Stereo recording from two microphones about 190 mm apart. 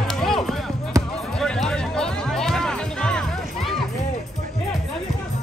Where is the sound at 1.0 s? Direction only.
15° right (ahead or behind).